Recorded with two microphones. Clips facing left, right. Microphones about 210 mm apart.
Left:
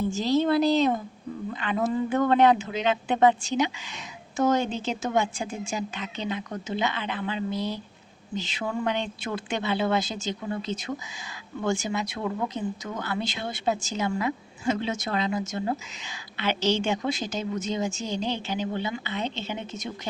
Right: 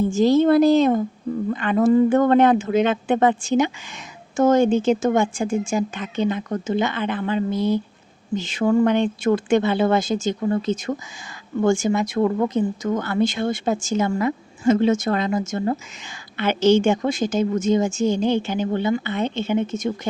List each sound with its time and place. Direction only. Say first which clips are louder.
0.1 s speech: right 8 dB; 50° right (ahead or behind)